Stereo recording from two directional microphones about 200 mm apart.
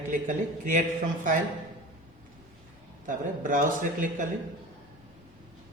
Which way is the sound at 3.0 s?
40° right (ahead or behind).